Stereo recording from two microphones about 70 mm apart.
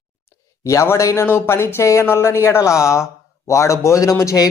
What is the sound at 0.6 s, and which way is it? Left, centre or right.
A man's voice, left.